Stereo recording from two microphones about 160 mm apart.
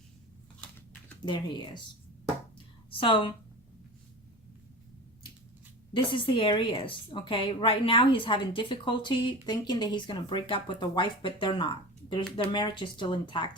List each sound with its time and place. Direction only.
1.2 s speech: 30° left (ahead or behind)
2.9 s a woman's voice: 30° left (ahead or behind)
5.9 s a woman's voice: 30° left (ahead or behind)